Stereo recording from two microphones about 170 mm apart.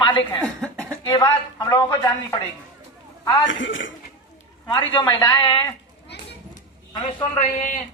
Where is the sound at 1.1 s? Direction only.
20° left (ahead or behind).